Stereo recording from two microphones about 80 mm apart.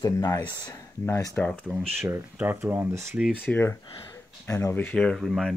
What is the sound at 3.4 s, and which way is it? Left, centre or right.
Speech, left.